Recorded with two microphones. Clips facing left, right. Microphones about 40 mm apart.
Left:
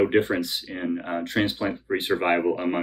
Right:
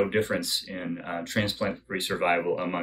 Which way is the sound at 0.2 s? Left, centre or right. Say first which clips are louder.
Left 2 dB; left.